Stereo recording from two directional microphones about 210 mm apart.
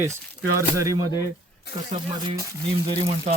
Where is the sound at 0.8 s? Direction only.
15° right (ahead or behind).